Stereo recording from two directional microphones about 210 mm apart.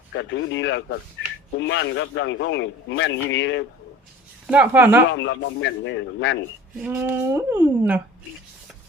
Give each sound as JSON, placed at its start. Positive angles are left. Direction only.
{"t": 0.1, "sound": "a man's voice", "side_deg": 60}
{"t": 4.4, "sound": "speech", "side_deg": -5}
{"t": 5.1, "sound": "a man's voice", "side_deg": 60}
{"t": 6.7, "sound": "speech", "side_deg": -5}